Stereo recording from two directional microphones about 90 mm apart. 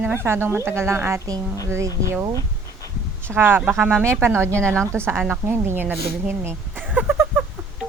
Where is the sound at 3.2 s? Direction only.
25° right (ahead or behind).